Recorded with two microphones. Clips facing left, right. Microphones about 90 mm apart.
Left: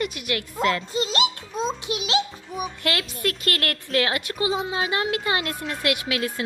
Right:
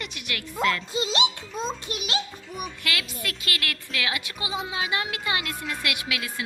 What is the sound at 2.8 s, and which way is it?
A woman's voice, 35° left (ahead or behind).